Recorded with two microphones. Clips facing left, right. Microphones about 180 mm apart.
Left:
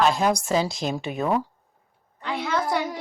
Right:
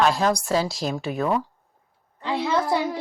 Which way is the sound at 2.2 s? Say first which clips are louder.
Right 3 dB; 25° right (ahead or behind).